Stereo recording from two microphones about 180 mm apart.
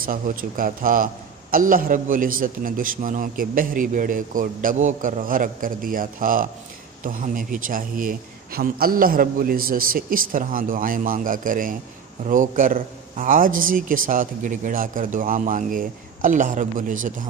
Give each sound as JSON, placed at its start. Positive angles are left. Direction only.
{"t": 0.0, "sound": "a man's voice", "side_deg": -50}